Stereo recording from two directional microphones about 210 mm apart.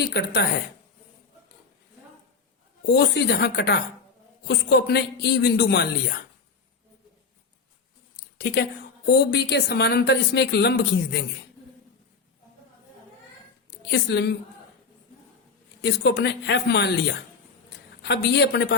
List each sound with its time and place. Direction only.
0.1 s speech: 55° left (ahead or behind)
2.8 s speech: 50° left (ahead or behind)
8.1 s a sound: 50° left (ahead or behind)
9.0 s speech: 50° left (ahead or behind)
13.9 s speech: 50° left (ahead or behind)
15.8 s speech: 55° left (ahead or behind)